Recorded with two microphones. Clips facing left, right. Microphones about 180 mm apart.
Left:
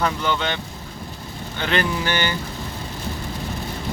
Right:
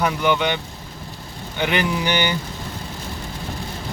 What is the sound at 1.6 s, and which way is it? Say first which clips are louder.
Speech: right 1 dB; 15° right (ahead or behind).